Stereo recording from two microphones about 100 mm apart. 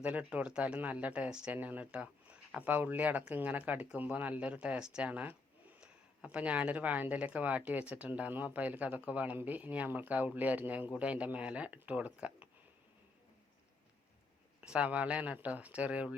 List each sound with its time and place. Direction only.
0.0 s speech: 15° right (ahead or behind)
14.6 s speech: 10° right (ahead or behind)